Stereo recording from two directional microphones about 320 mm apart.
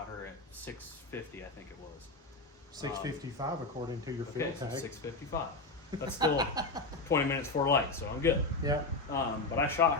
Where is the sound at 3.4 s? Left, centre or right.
Centre.